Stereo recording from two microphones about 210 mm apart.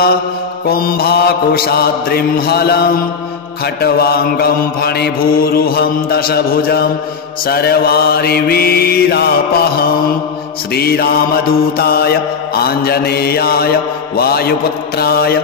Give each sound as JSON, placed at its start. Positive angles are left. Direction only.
{"t": 0.7, "sound": "mantra", "side_deg": 45}